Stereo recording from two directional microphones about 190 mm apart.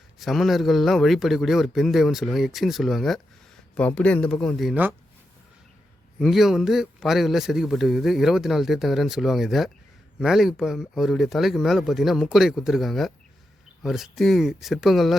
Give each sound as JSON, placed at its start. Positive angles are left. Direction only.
{"t": 0.2, "sound": "speech", "side_deg": 0}
{"t": 6.1, "sound": "speech", "side_deg": 0}